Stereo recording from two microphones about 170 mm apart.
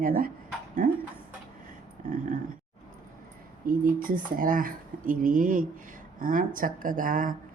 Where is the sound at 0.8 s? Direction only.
55° right (ahead or behind).